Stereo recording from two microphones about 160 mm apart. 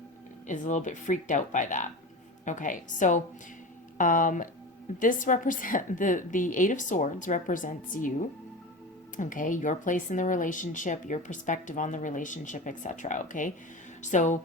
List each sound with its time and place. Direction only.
0.4 s a woman's voice: 50° left (ahead or behind)